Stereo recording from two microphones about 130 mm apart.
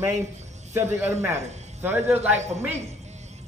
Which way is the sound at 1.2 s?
15° right (ahead or behind).